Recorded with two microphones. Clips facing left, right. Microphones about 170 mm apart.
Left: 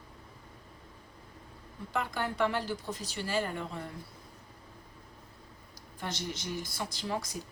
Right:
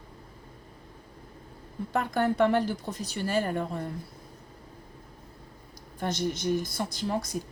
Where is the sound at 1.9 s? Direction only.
45° right (ahead or behind).